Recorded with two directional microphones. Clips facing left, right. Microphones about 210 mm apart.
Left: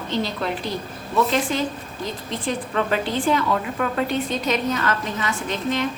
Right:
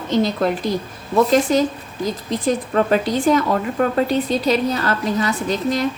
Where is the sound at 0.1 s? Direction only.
45° right (ahead or behind).